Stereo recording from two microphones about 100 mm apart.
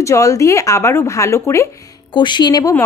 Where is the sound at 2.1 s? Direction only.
50° left (ahead or behind).